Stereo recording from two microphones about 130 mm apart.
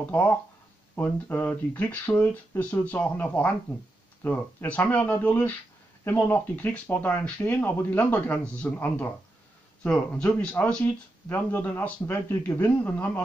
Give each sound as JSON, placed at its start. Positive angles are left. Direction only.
{"t": 0.0, "sound": "speech", "side_deg": 15}
{"t": 10.1, "sound": "speech", "side_deg": 10}